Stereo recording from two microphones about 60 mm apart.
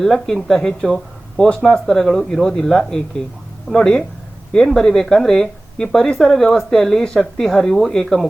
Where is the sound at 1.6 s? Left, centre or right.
Centre.